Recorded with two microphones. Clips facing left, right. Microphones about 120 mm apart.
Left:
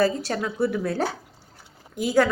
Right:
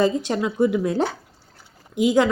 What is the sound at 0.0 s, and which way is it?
Speech, 20° right (ahead or behind).